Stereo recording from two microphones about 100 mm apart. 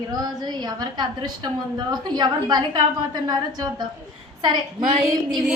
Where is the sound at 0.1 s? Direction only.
40° right (ahead or behind).